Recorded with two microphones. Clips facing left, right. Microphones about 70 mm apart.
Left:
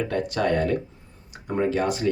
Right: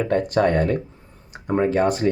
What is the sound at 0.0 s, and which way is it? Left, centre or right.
Speech, right.